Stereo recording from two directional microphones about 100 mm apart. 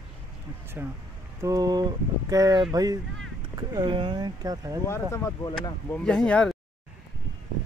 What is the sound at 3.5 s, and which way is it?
Speech, 45° right (ahead or behind).